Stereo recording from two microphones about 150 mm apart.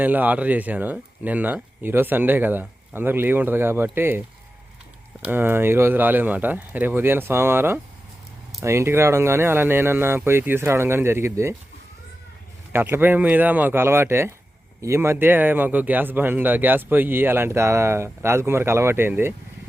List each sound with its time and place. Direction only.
0.0 s speech: 10° right (ahead or behind)
5.2 s speech: 15° right (ahead or behind)
12.7 s speech: 15° right (ahead or behind)